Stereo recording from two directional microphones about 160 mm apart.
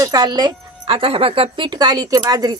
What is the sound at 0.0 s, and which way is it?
Speech, 25° right (ahead or behind).